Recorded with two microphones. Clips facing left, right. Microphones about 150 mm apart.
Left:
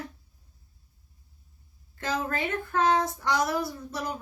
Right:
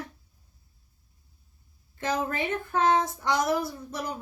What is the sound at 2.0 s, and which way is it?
A woman's voice, 20° right (ahead or behind).